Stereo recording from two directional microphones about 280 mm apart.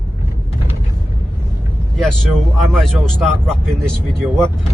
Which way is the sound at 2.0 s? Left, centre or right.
Centre.